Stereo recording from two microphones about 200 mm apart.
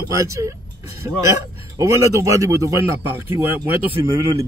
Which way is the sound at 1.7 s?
15° right (ahead or behind).